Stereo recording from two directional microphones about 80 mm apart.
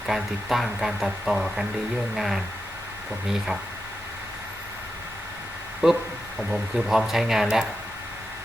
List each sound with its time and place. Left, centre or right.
0.0 s speech: centre
5.8 s speech: centre